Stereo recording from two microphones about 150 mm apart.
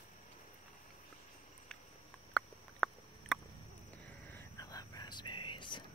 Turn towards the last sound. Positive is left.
turn(degrees=30)  # may be behind; listen again after turning